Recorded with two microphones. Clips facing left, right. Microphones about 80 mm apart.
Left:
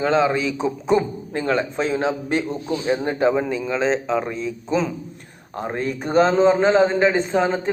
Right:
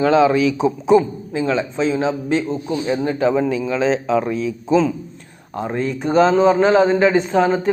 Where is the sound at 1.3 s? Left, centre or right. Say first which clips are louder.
Right 2 dB; left.